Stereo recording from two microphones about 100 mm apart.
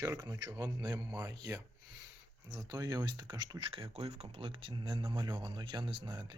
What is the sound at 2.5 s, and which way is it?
Speech, 40° right (ahead or behind).